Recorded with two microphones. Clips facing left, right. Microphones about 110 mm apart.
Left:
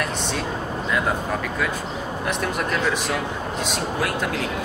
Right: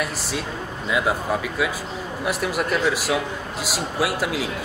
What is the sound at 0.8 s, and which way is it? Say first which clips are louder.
A man's voice: right 2 dB; 5° right (ahead or behind).